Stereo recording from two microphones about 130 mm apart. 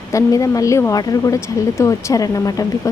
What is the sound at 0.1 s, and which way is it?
Speech, 25° left (ahead or behind).